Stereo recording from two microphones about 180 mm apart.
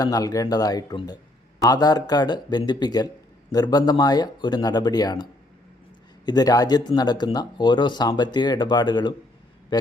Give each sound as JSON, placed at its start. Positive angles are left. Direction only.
{"t": 0.0, "sound": "speech", "side_deg": 20}